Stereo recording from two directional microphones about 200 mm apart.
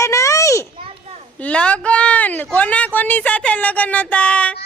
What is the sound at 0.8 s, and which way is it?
Children playing, 30° right (ahead or behind).